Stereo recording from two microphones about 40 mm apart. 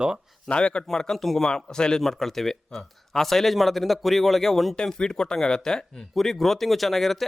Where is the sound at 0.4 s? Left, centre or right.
Left.